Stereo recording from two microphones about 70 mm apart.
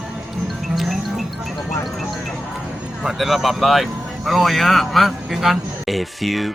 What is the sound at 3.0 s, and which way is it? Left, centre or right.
Speech, centre.